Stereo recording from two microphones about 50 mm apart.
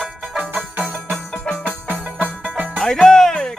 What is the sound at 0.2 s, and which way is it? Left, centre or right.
Music, right.